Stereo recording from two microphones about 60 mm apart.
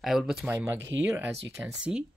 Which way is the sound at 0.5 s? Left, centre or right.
Right.